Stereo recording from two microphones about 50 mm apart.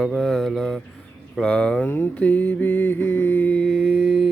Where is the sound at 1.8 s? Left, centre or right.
Left.